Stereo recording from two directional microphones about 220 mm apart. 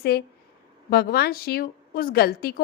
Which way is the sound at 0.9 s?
45° left (ahead or behind).